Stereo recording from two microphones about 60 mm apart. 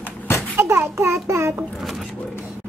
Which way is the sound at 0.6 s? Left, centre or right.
Right.